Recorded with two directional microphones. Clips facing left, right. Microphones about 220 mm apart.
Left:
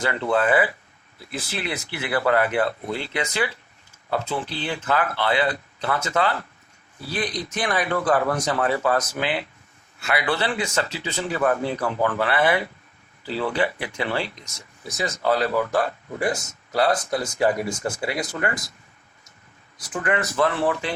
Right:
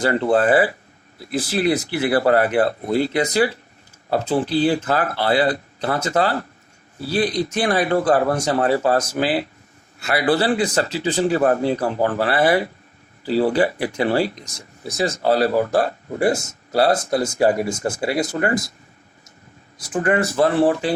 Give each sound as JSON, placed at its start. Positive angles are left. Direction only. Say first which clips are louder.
{"t": 0.0, "sound": "speech", "louder": "right 5 dB", "side_deg": -35}
{"t": 19.9, "sound": "speech", "louder": "right 6 dB", "side_deg": -35}